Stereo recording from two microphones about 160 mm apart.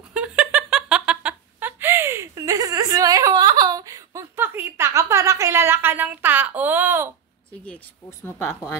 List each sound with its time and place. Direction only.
0.1 s giggle: 5° right (ahead or behind)
7.6 s a woman's voice: 10° left (ahead or behind)